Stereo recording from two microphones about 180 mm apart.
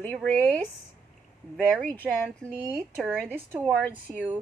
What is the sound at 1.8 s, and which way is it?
Speech, 5° left (ahead or behind).